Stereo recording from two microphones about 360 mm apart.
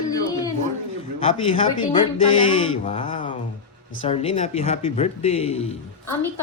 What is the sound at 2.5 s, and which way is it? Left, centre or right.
Speech, centre.